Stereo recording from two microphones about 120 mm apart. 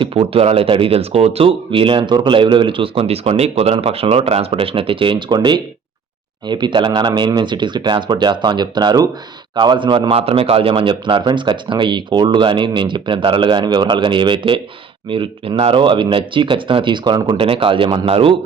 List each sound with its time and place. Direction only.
0.0 s speech: 55° right (ahead or behind)